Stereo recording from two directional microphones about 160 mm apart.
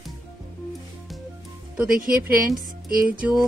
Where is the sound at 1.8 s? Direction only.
65° right (ahead or behind).